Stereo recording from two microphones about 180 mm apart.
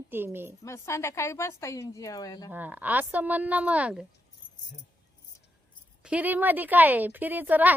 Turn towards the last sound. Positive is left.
turn(degrees=-10)  # may be behind; listen again after turning